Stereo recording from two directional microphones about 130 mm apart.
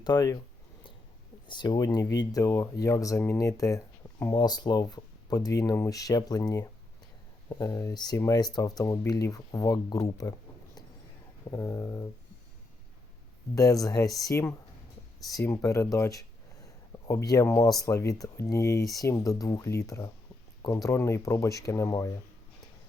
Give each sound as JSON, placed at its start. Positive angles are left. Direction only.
{"t": 0.0, "sound": "speech", "side_deg": 30}
{"t": 1.5, "sound": "speech", "side_deg": 35}
{"t": 11.5, "sound": "speech", "side_deg": 20}
{"t": 13.6, "sound": "speech", "side_deg": 25}